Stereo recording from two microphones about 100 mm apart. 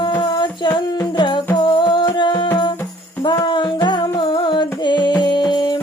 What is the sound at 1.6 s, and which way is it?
Music, 50° left (ahead or behind).